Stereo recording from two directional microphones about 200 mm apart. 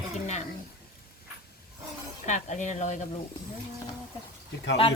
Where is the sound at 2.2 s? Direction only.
35° left (ahead or behind).